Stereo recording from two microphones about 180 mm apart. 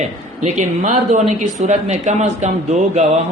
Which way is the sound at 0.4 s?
40° right (ahead or behind).